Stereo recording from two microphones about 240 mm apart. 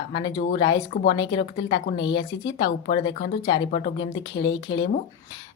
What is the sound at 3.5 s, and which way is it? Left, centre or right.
Speech, left.